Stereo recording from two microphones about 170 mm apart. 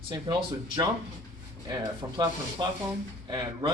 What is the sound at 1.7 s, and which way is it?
Speech, 25° right (ahead or behind).